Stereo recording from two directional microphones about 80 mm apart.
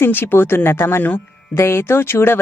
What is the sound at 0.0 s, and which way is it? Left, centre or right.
A woman's voice, left.